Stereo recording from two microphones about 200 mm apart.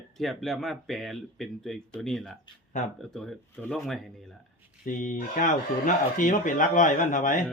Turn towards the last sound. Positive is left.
turn(degrees=40)  # may be behind; listen again after turning